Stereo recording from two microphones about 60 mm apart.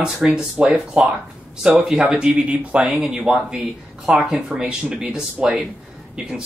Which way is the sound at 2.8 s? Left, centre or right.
Centre.